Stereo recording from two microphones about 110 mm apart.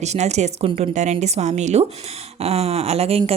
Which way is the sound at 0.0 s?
90° right.